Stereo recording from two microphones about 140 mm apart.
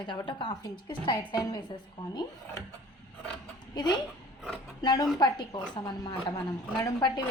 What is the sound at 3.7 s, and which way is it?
A woman's voice, 30° left (ahead or behind).